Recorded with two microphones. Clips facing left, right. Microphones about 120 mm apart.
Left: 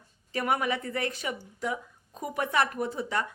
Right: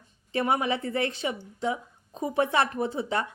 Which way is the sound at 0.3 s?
25° right (ahead or behind).